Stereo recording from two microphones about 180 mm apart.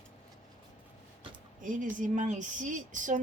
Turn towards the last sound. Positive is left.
turn(degrees=-45)  # may be behind; listen again after turning